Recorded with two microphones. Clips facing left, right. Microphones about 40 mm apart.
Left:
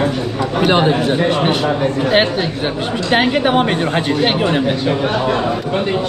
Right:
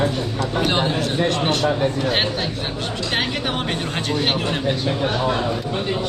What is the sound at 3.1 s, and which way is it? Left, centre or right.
Speech, centre.